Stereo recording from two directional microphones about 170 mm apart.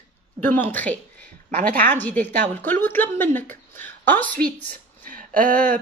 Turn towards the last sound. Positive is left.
turn(degrees=-55)  # may be behind; listen again after turning